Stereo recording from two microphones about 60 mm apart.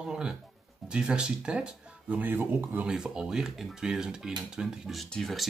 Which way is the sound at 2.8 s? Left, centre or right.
Centre.